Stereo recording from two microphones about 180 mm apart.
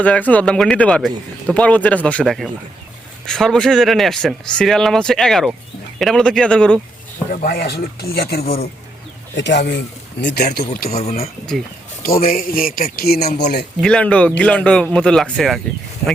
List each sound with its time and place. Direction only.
0.0 s a man's voice: 10° left (ahead or behind)
7.4 s speech: 65° left (ahead or behind)
9.3 s speech: 75° left (ahead or behind)
10.8 s speech: 35° left (ahead or behind)
12.2 s speech: 50° left (ahead or behind); by 13.7 s 65° left (ahead or behind)
13.8 s a man's voice: 5° left (ahead or behind)